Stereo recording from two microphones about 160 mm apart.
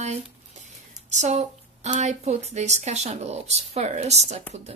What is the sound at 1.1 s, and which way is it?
Speech, 45° right (ahead or behind).